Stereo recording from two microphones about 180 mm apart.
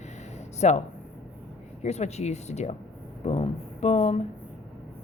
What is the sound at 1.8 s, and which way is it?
Speech, 40° left (ahead or behind).